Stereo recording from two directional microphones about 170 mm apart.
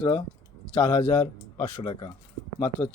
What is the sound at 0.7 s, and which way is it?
Speech, 45° left (ahead or behind).